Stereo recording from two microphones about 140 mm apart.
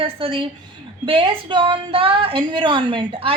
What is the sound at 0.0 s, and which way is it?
A woman's voice, 40° right (ahead or behind).